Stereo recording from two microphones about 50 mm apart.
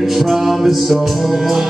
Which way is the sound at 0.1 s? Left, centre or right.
Centre.